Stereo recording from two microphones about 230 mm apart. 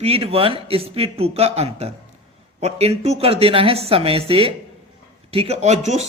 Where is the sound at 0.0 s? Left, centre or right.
Right.